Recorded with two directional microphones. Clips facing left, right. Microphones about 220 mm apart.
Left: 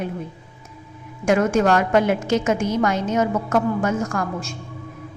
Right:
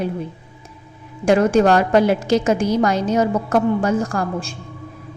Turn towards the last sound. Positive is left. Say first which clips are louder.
# right 2 dB
turn(degrees=-30)  # may be behind; listen again after turning